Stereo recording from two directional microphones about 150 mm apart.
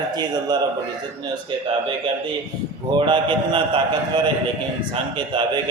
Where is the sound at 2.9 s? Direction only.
30° right (ahead or behind).